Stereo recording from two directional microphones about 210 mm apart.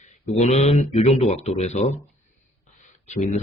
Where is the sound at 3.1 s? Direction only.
35° left (ahead or behind).